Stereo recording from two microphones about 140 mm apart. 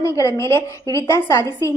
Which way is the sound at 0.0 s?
20° left (ahead or behind).